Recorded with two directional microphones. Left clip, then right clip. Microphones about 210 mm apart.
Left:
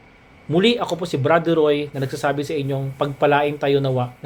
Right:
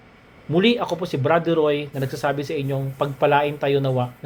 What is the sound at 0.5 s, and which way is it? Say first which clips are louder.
Speech: left 1 dB; 5° left (ahead or behind).